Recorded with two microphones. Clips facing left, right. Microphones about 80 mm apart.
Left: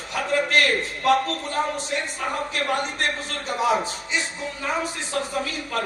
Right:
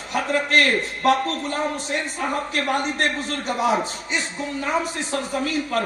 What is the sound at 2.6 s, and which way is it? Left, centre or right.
Speech, right.